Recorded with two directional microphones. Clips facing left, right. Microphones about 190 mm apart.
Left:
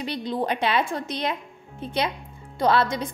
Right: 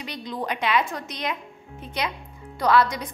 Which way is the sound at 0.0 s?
30° left (ahead or behind).